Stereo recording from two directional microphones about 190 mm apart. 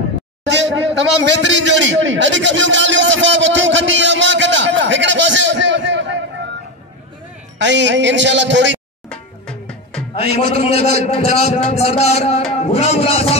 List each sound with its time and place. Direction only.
0.5 s a sound: 70° right (ahead or behind)
7.5 s a man's voice: 70° right (ahead or behind)
9.1 s music: 5° left (ahead or behind)
10.1 s a man's voice: 35° left (ahead or behind)